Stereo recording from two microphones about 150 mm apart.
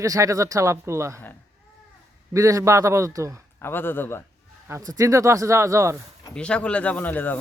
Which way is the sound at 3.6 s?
15° left (ahead or behind).